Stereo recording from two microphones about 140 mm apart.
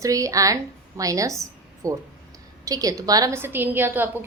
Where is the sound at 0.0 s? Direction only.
25° right (ahead or behind).